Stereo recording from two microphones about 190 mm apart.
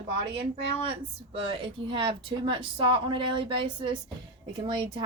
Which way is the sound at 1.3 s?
30° right (ahead or behind).